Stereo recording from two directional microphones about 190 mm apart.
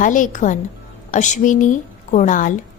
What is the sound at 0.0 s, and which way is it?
A woman's voice, 45° left (ahead or behind).